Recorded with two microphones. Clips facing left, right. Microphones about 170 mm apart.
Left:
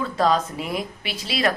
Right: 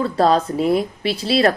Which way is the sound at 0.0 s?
35° right (ahead or behind).